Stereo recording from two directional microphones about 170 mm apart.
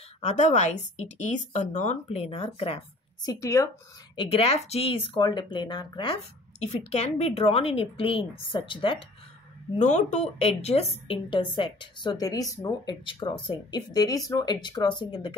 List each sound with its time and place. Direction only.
0.2 s speech: 45° left (ahead or behind)
3.3 s a woman's voice: 20° left (ahead or behind)
4.2 s a woman's voice: 35° left (ahead or behind)
6.6 s a woman's voice: 40° left (ahead or behind)
9.8 s a woman's voice: 45° left (ahead or behind); by 15.3 s 25° left (ahead or behind)